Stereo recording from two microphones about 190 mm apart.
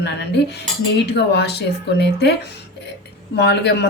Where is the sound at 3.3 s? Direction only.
65° left (ahead or behind).